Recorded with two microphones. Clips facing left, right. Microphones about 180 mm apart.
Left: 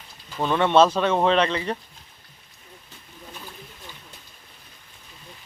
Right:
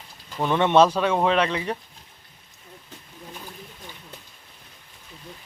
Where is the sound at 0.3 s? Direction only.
15° right (ahead or behind).